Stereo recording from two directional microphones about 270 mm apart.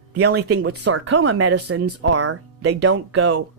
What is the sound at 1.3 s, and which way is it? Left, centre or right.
Speech, right.